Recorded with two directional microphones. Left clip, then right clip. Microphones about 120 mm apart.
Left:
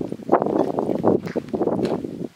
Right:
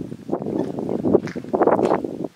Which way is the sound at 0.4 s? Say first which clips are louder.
Left 5 dB; 60° left (ahead or behind).